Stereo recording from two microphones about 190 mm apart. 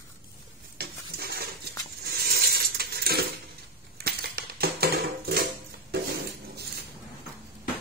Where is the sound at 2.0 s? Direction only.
55° right (ahead or behind).